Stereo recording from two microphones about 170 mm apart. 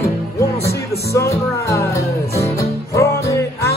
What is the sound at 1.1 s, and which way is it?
Music, 15° left (ahead or behind).